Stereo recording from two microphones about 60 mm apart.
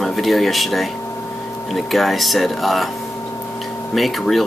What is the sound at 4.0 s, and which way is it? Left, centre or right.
Speech, centre.